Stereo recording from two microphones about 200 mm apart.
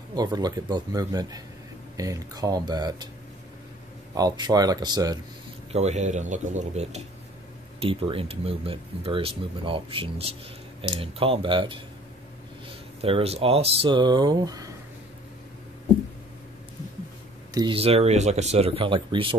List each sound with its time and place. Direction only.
0.1 s speech: 20° right (ahead or behind)
4.1 s speech: 20° right (ahead or behind)
5.7 s speech: 35° right (ahead or behind)
17.6 s speech: 25° right (ahead or behind)